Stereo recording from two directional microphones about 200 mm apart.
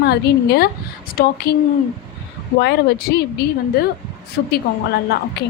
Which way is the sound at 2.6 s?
55° left (ahead or behind).